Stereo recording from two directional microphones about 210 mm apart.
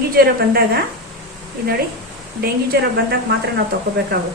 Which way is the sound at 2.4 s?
50° right (ahead or behind).